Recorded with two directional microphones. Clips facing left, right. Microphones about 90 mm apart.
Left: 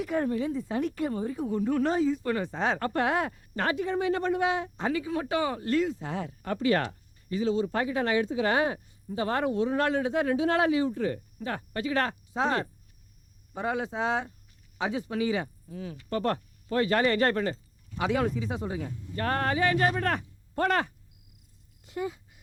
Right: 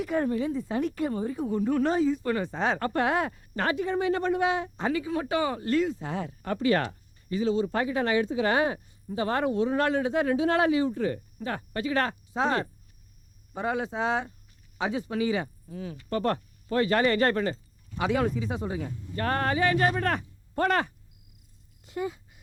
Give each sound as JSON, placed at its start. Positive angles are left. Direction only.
{"t": 0.0, "sound": "a woman's voice", "side_deg": -30}
{"t": 21.9, "sound": "speech", "side_deg": -30}